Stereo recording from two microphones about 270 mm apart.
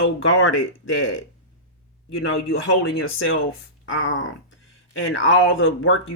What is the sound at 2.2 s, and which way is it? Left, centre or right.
Speech, left.